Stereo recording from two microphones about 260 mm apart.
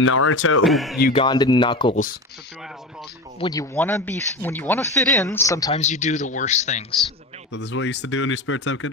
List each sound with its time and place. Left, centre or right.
0.0 s speech: left
0.7 s speech: centre
1.1 s speech: centre
3.3 s speech: centre
5.7 s speech: left
7.5 s speech: left